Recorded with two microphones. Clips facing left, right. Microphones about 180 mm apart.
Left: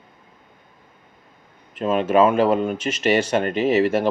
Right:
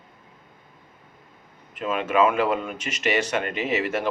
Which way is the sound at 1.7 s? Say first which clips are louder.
Left 6 dB; 30° left (ahead or behind).